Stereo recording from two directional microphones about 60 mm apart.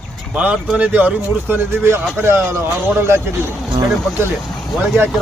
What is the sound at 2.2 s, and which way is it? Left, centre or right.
Speech, right.